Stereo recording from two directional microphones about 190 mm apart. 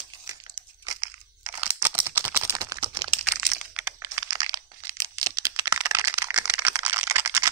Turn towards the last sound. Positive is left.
turn(degrees=-15)  # may be behind; listen again after turning